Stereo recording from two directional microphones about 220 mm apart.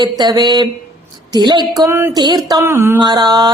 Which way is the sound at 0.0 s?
20° right (ahead or behind).